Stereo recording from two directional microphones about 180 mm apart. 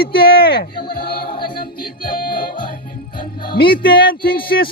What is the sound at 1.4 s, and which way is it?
Music, 55° left (ahead or behind).